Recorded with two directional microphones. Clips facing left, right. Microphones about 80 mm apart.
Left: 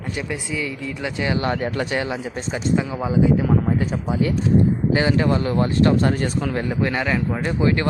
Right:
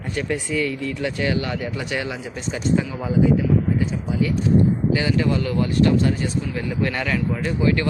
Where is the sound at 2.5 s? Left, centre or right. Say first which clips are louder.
Even; centre.